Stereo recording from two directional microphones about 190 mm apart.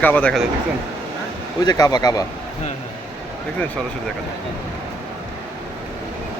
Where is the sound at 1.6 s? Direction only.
20° left (ahead or behind).